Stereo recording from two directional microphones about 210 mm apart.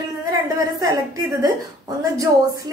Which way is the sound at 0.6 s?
15° right (ahead or behind).